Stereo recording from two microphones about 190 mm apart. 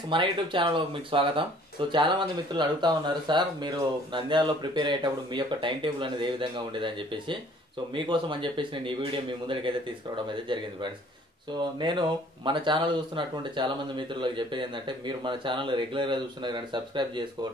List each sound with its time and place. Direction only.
0.1 s speech: 25° right (ahead or behind)
11.8 s speech: 25° right (ahead or behind)